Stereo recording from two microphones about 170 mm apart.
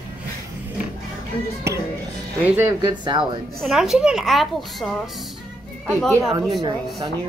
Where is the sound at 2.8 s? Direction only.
25° right (ahead or behind).